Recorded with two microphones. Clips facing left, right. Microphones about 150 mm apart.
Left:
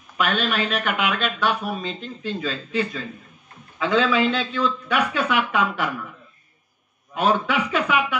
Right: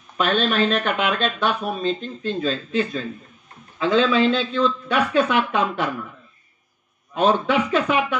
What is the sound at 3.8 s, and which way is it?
A man's voice, 25° right (ahead or behind).